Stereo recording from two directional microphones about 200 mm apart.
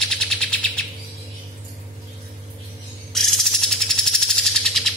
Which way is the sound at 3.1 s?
Centre (ahead or behind).